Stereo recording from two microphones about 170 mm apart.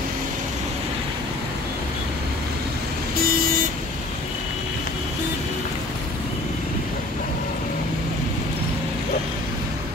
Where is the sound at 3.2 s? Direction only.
55° right (ahead or behind).